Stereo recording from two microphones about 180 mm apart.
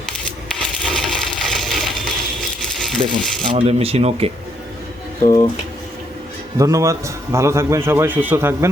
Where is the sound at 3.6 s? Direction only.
35° right (ahead or behind).